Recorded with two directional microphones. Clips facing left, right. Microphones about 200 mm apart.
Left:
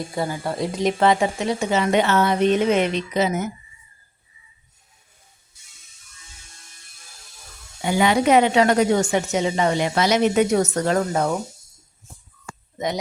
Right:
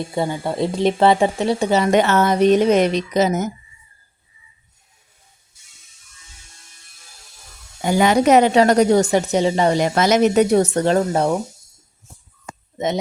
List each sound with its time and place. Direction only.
0.1 s a woman's voice: 25° right (ahead or behind); by 3.5 s 40° right (ahead or behind)
7.8 s a woman's voice: 40° right (ahead or behind)
12.5 s a sound: 25° right (ahead or behind)